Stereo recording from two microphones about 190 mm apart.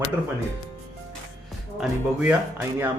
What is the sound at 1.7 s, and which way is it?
Speech, 10° right (ahead or behind).